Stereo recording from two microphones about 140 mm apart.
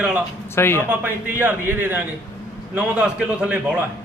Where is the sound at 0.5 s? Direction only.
15° left (ahead or behind).